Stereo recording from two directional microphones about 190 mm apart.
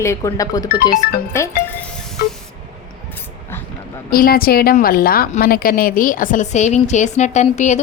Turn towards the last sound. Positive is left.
turn(degrees=40)  # may be behind; listen again after turning